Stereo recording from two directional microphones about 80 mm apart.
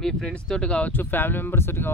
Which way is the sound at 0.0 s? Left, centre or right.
Centre.